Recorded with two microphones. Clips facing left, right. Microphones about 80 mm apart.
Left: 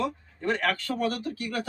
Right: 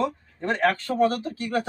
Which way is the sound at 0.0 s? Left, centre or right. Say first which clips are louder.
Right 2 dB; right.